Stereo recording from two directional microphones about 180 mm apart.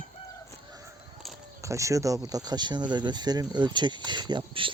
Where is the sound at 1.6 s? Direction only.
15° right (ahead or behind).